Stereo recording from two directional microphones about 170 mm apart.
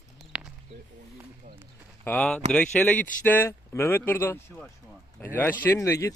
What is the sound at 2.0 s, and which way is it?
Speech, 5° left (ahead or behind).